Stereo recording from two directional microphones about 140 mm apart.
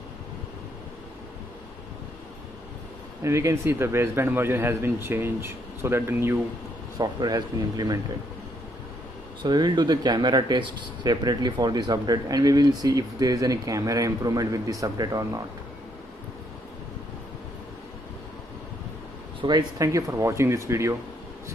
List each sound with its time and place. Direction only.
3.3 s speech: 20° right (ahead or behind)
7.0 s speech: 25° right (ahead or behind)
9.4 s speech: 30° right (ahead or behind)
19.4 s speech: 25° right (ahead or behind)